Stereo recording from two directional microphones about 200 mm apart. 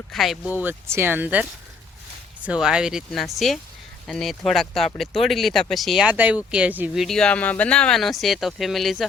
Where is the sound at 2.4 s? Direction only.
5° right (ahead or behind).